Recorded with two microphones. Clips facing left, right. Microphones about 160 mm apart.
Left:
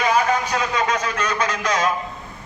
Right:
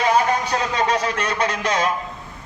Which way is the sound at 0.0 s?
30° right (ahead or behind).